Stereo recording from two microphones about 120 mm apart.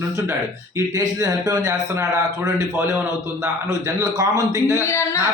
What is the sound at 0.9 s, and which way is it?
A man's voice, 30° right (ahead or behind).